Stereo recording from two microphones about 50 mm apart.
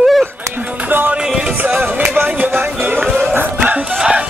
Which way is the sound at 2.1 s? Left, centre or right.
Right.